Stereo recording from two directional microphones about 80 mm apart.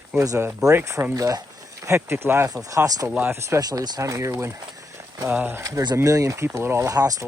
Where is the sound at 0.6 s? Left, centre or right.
Right.